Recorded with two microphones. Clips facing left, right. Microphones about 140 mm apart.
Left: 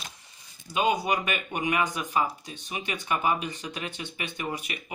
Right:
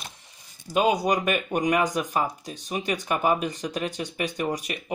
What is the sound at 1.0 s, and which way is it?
Speech, 45° right (ahead or behind).